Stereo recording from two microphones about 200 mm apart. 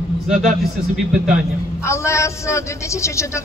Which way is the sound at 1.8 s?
15° left (ahead or behind).